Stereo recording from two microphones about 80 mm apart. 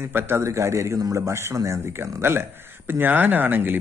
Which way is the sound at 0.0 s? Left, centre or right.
Right.